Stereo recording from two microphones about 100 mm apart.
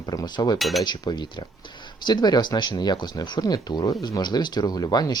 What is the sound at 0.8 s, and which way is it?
Speech, 45° left (ahead or behind).